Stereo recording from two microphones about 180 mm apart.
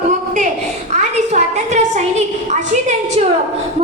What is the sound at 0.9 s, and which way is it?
A woman's voice, 40° right (ahead or behind).